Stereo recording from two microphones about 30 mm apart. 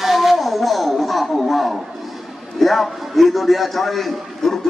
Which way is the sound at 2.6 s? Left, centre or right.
Centre.